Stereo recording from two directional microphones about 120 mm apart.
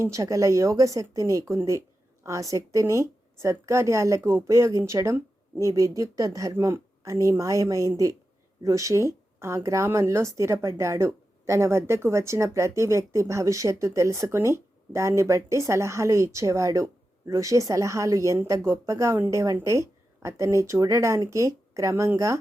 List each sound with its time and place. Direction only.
0.0 s speech: 25° right (ahead or behind)